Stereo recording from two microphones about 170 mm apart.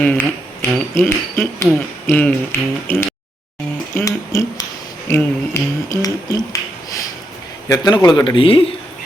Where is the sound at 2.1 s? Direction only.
10° left (ahead or behind).